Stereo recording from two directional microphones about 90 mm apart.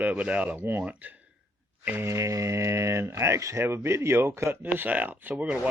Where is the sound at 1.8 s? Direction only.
20° right (ahead or behind).